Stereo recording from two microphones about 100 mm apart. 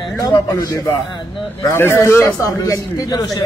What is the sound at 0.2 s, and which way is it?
A man's voice, 40° left (ahead or behind).